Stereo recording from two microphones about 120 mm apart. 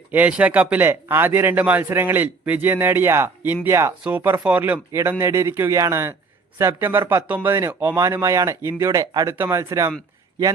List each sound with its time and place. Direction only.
0.1 s speech: 10° right (ahead or behind)